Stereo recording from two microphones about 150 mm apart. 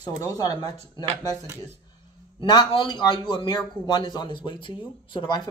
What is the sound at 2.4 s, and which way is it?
A man's voice, 30° left (ahead or behind).